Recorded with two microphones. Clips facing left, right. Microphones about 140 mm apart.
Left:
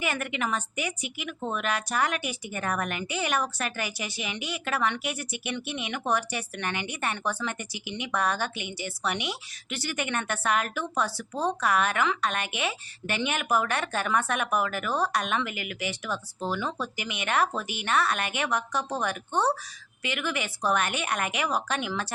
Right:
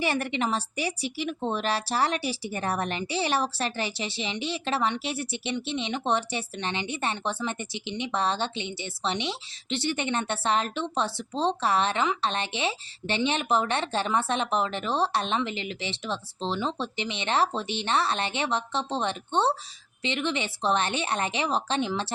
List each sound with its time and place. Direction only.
0.0 s a woman's voice: 35° right (ahead or behind)